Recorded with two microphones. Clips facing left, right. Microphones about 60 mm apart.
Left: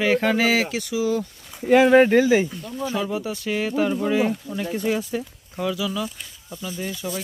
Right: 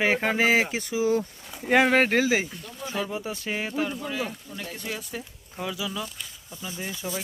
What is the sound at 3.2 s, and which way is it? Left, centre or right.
Speech, centre.